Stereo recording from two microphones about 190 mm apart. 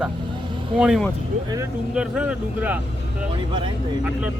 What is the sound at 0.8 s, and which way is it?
Speech, centre (ahead or behind).